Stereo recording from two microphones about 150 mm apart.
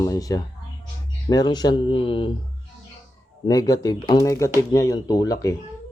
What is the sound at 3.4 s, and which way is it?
Speech, 25° left (ahead or behind).